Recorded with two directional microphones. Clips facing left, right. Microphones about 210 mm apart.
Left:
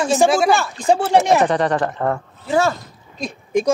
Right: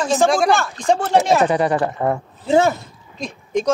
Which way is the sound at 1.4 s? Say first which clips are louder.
Even; 10° right (ahead or behind).